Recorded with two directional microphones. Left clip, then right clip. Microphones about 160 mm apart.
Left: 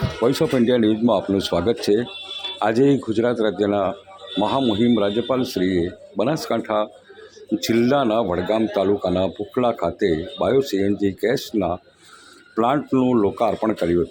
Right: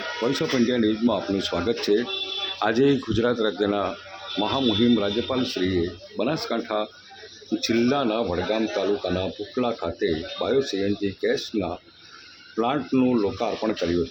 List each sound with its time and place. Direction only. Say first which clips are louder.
0.2 s a man's voice: left 5 dB; 20° left (ahead or behind)